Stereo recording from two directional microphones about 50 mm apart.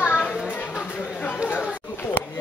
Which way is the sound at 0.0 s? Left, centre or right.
Left.